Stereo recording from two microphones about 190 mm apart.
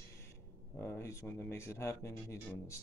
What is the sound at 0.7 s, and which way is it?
Speech, 15° left (ahead or behind).